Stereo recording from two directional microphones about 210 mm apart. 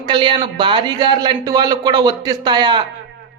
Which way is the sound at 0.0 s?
25° right (ahead or behind).